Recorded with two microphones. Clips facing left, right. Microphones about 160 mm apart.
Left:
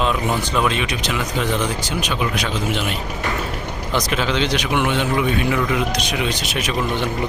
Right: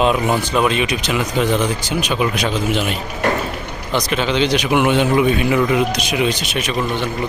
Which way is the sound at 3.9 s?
Centre (ahead or behind).